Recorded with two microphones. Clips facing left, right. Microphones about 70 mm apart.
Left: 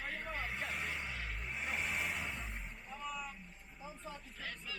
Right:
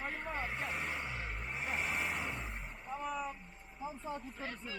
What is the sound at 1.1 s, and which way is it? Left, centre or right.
Vehicle, right.